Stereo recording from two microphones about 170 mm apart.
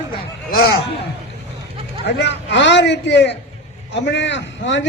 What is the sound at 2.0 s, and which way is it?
A man's voice, 90° left.